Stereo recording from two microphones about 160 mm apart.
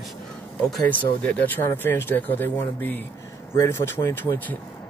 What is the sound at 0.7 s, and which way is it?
Speech, 5° left (ahead or behind).